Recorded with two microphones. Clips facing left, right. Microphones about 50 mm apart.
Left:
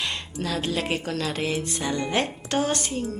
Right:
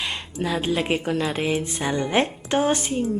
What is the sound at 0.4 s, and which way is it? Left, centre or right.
A woman's voice, centre.